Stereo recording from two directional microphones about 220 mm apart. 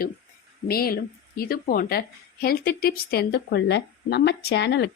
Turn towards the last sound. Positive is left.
turn(degrees=50)  # may be behind; listen again after turning